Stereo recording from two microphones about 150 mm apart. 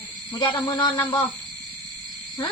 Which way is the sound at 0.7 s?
25° left (ahead or behind).